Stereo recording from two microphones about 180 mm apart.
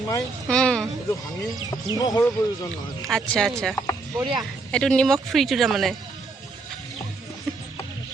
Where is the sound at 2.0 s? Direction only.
20° left (ahead or behind).